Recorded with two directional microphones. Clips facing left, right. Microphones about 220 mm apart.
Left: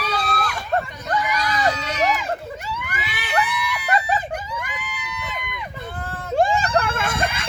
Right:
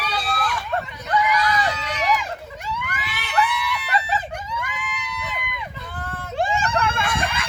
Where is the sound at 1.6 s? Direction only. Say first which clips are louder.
Left 4 dB; 45° left (ahead or behind).